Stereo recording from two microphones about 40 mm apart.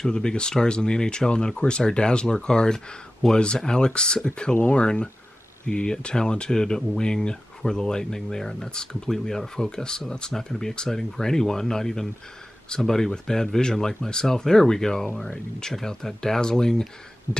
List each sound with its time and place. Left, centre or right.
0.0 s speech: centre
3.2 s speech: centre
3.5 s speech: centre